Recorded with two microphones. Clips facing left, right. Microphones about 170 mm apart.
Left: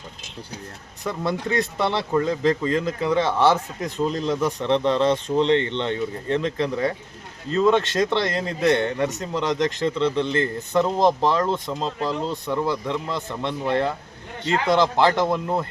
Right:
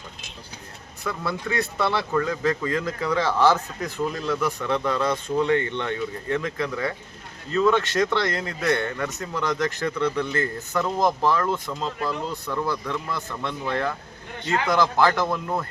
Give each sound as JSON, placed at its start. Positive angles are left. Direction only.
{"t": 1.2, "sound": "speech", "side_deg": 20}